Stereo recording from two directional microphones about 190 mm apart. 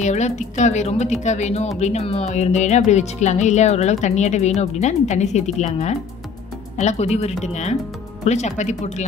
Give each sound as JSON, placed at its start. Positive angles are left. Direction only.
{"t": 0.0, "sound": "speech", "side_deg": 40}
{"t": 6.8, "sound": "speech", "side_deg": 35}